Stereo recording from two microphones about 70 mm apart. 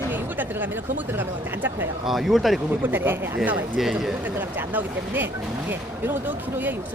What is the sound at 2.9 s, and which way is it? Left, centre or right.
Speech, right.